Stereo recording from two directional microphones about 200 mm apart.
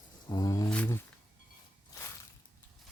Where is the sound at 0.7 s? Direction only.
10° left (ahead or behind).